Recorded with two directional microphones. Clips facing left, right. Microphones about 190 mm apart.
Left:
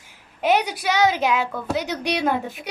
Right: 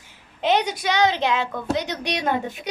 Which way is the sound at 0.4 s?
10° left (ahead or behind).